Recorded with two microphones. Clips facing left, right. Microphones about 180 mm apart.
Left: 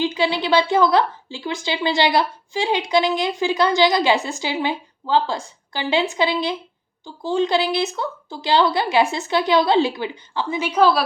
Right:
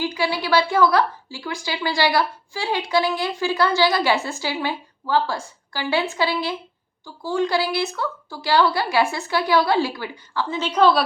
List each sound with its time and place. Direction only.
0.0 s a woman's voice: 20° left (ahead or behind); by 11.0 s 5° left (ahead or behind)